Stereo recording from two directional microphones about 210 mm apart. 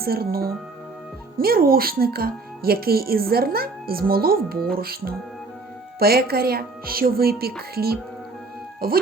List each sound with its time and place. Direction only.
0.0 s speech: 45° right (ahead or behind)
8.8 s speech: 45° right (ahead or behind)